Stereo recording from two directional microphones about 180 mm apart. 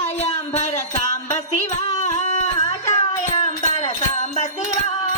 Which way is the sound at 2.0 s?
40° left (ahead or behind).